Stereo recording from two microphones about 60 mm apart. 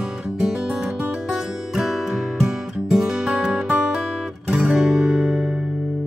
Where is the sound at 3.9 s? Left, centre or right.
Centre.